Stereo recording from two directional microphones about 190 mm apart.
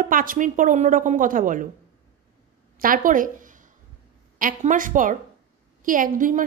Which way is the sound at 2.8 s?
45° right (ahead or behind).